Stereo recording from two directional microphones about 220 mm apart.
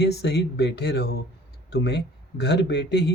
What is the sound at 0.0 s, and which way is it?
Speech, 50° left (ahead or behind).